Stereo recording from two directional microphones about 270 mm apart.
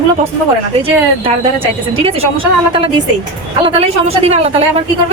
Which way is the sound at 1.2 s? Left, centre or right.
Centre.